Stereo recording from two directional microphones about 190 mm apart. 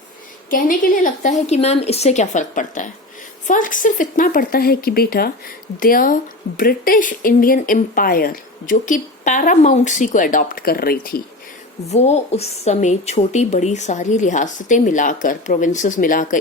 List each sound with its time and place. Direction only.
0.5 s a woman's voice: 45° left (ahead or behind)
11.9 s a woman's voice: 35° left (ahead or behind)